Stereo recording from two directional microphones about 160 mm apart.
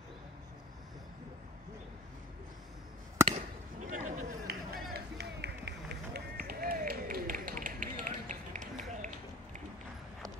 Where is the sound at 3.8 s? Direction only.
55° right (ahead or behind).